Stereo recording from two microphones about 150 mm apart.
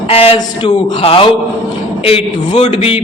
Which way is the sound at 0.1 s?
40° left (ahead or behind).